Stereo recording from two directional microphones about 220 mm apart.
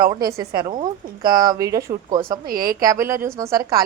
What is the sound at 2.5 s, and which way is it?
Speech, 40° right (ahead or behind).